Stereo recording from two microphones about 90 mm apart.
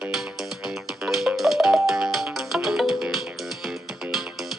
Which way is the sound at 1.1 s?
Centre (ahead or behind).